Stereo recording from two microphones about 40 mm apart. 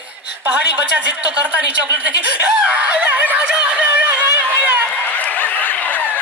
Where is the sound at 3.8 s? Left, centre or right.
Right.